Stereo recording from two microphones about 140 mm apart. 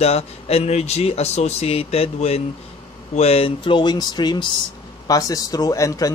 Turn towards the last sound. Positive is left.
turn(degrees=25)  # may be behind; listen again after turning